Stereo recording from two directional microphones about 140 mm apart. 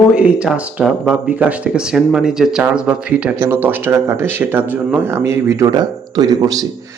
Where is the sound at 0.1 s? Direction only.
10° right (ahead or behind).